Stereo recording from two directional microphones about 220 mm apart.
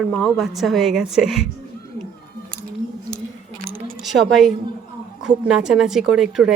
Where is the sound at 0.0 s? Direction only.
Centre (ahead or behind).